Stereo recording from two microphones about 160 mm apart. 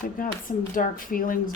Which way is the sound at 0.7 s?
60° left (ahead or behind).